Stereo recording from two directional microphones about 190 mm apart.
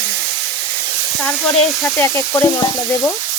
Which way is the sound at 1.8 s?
15° left (ahead or behind).